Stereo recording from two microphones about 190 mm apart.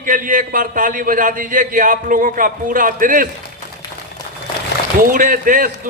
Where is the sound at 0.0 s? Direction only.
45° right (ahead or behind).